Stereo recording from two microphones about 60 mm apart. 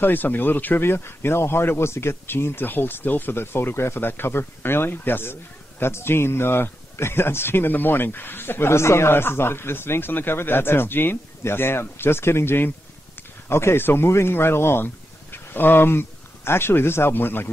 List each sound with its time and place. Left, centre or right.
0.0 s speech: left